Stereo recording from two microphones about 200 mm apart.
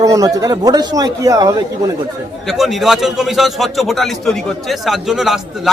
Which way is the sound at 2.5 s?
Centre (ahead or behind).